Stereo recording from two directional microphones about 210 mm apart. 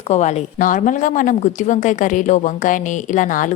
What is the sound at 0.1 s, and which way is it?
A woman's voice, 35° left (ahead or behind).